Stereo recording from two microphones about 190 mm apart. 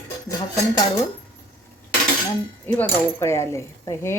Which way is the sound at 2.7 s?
10° left (ahead or behind).